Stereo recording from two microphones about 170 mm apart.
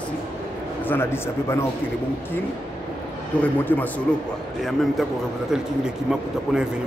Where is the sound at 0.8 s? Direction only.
15° left (ahead or behind).